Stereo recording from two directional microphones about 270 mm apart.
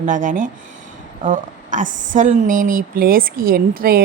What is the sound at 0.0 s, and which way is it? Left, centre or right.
A woman's voice, right.